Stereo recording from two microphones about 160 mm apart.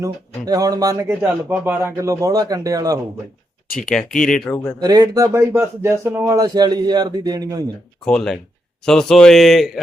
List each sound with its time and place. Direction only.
0.0 s speech: 25° right (ahead or behind)
3.8 s speech: 5° left (ahead or behind)
4.8 s speech: 25° right (ahead or behind)
8.0 s speech: 5° left (ahead or behind)